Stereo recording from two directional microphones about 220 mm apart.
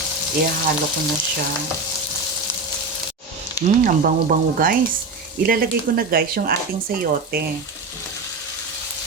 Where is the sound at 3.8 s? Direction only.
40° right (ahead or behind).